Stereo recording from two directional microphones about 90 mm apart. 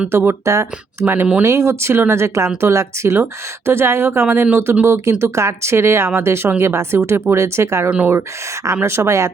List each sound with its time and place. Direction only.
0.1 s speech: 30° right (ahead or behind)
7.9 s speech: 15° right (ahead or behind)
8.6 s speech: 30° right (ahead or behind)